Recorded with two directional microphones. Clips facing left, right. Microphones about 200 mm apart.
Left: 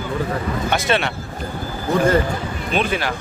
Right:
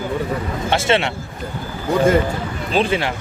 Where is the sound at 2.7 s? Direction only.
30° right (ahead or behind).